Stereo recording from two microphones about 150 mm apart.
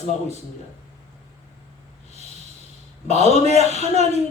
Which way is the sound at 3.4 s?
45° right (ahead or behind).